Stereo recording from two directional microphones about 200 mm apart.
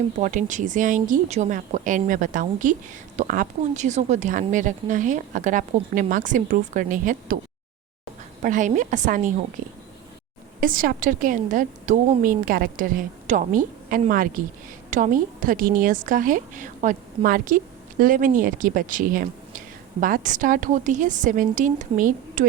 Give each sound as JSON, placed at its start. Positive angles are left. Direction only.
{"t": 0.2, "sound": "speech", "side_deg": -40}
{"t": 8.4, "sound": "speech", "side_deg": -40}
{"t": 10.6, "sound": "a woman's voice", "side_deg": -45}